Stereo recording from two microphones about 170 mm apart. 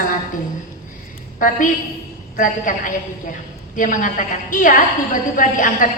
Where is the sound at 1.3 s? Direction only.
50° left (ahead or behind).